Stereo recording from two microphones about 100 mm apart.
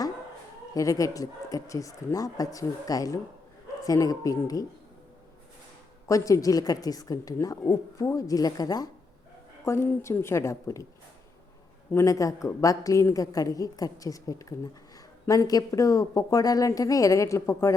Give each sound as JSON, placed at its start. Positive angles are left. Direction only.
{"t": 0.7, "sound": "speech", "side_deg": 35}
{"t": 6.1, "sound": "speech", "side_deg": 35}
{"t": 9.6, "sound": "a woman's voice", "side_deg": 25}
{"t": 11.9, "sound": "speech", "side_deg": 30}